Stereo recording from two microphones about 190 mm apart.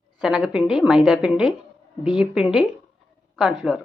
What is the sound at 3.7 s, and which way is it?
Speech, 5° right (ahead or behind).